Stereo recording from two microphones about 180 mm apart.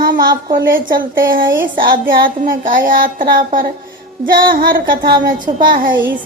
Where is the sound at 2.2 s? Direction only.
50° right (ahead or behind).